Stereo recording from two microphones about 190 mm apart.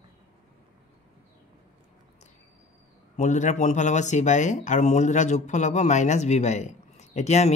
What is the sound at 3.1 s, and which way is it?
Speech, 40° left (ahead or behind).